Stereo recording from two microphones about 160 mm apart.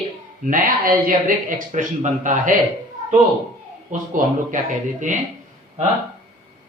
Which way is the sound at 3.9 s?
55° right (ahead or behind).